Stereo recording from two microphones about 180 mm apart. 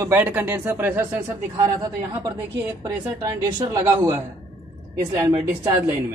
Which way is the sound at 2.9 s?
15° right (ahead or behind).